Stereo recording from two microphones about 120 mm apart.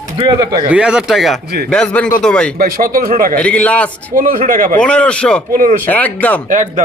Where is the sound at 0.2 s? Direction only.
30° right (ahead or behind).